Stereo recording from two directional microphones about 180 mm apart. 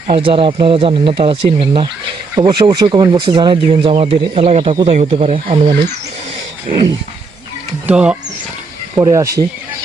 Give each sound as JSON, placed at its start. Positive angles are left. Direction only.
{"t": 0.1, "sound": "speech", "side_deg": -30}
{"t": 7.9, "sound": "speech", "side_deg": -5}
{"t": 9.0, "sound": "speech", "side_deg": -15}